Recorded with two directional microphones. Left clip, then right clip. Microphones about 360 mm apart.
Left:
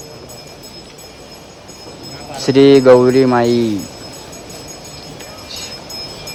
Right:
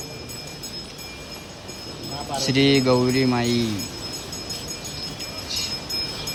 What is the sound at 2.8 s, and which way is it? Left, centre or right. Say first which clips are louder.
Music: left 12 dB; left.